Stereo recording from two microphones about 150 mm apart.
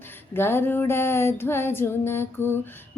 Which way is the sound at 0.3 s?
15° left (ahead or behind).